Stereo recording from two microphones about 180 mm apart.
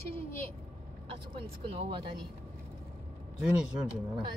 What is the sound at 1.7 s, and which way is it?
Speech, 30° right (ahead or behind).